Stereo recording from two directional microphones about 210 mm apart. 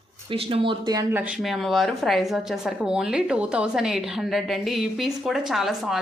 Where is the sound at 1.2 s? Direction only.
5° right (ahead or behind).